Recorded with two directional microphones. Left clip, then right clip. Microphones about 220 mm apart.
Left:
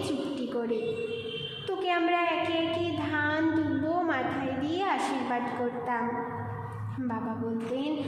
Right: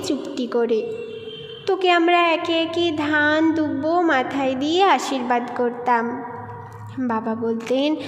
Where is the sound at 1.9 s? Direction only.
45° right (ahead or behind).